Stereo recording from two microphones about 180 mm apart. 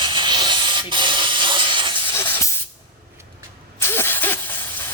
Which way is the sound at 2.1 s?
15° left (ahead or behind).